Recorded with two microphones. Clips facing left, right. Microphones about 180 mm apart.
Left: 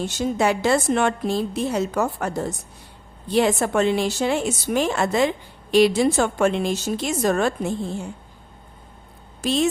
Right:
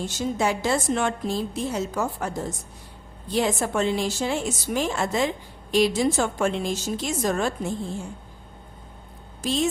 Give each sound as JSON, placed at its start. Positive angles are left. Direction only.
{"t": 0.0, "sound": "a woman's voice", "side_deg": 65}
{"t": 9.4, "sound": "speech", "side_deg": 65}